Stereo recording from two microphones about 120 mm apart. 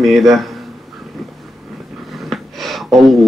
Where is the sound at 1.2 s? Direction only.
Centre (ahead or behind).